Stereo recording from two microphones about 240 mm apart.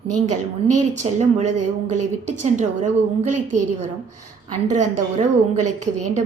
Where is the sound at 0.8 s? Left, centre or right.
Right.